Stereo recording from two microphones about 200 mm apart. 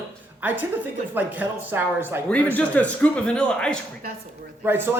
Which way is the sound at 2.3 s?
5° left (ahead or behind).